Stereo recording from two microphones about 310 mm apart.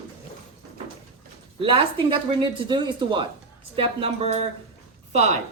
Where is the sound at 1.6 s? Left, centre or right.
Centre.